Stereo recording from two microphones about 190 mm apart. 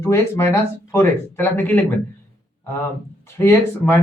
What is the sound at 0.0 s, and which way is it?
A man's voice, 15° left (ahead or behind).